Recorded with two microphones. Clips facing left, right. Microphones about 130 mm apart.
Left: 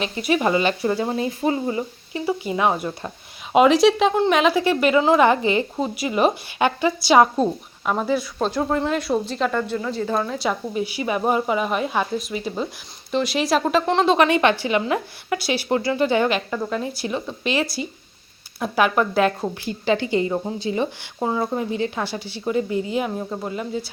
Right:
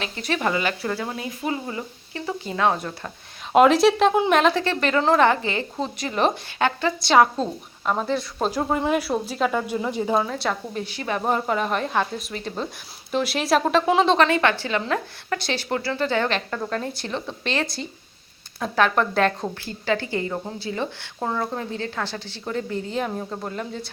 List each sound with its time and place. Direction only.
0.0 s a woman's voice: 15° left (ahead or behind)
3.5 s a woman's voice: centre (ahead or behind)
5.3 s a woman's voice: 15° left (ahead or behind)
8.4 s speech: 10° right (ahead or behind)
10.2 s a woman's voice: centre (ahead or behind)
14.2 s a woman's voice: 20° left (ahead or behind)
19.8 s a woman's voice: 20° left (ahead or behind)